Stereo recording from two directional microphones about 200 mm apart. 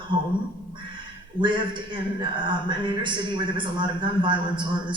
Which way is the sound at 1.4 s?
25° right (ahead or behind).